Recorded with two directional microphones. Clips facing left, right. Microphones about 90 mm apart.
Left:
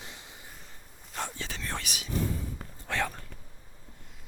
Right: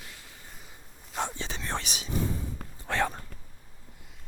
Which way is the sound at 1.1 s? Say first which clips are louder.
Right 3 dB; 20° right (ahead or behind).